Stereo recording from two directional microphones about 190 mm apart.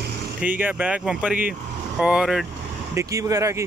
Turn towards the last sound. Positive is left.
turn(degrees=-15)  # may be behind; listen again after turning